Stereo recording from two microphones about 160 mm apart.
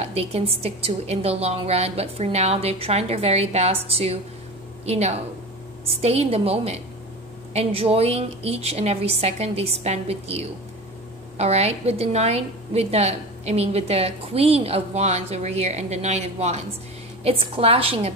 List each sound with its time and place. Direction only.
0.0 s a woman's voice: 40° right (ahead or behind)